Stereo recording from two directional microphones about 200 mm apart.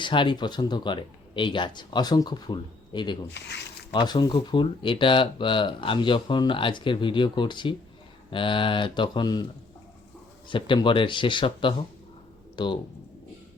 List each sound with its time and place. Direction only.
0.0 s speech: 25° left (ahead or behind)
10.5 s speech: 25° left (ahead or behind)